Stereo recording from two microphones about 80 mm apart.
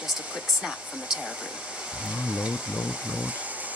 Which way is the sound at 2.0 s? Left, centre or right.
Centre.